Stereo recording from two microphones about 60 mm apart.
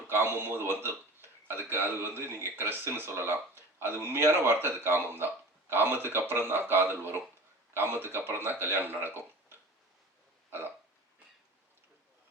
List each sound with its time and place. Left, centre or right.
0.1 s a man's voice: right